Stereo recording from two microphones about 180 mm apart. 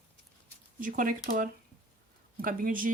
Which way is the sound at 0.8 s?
50° right (ahead or behind).